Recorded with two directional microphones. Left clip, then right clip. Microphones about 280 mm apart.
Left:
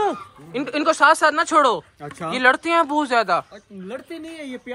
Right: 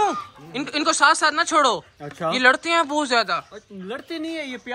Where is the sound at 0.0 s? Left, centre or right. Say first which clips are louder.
Right 1 dB; centre.